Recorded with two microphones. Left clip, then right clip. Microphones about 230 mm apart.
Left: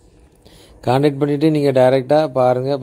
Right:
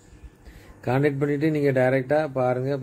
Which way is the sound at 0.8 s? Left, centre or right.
Left.